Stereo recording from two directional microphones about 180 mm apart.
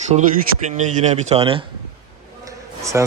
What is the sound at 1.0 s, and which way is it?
Speech, 40° right (ahead or behind).